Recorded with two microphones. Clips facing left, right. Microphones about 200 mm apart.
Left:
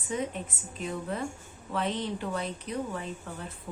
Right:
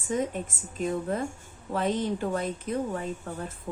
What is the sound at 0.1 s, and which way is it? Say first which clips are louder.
A woman's voice: right 4 dB; 45° right (ahead or behind).